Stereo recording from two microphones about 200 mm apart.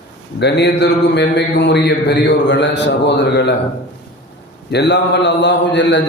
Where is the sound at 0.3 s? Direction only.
60° left (ahead or behind).